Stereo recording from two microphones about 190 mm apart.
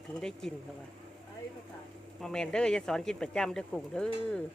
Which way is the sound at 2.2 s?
5° left (ahead or behind).